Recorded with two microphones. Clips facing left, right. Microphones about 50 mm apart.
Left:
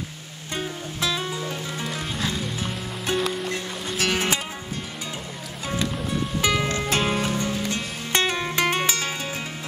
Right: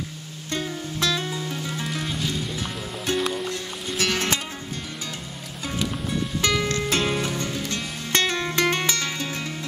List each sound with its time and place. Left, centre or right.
0.5 s music: centre
6.4 s music: centre
6.9 s music: centre
7.2 s music: centre